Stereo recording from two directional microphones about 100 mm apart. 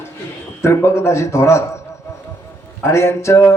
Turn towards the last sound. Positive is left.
turn(degrees=30)  # may be behind; listen again after turning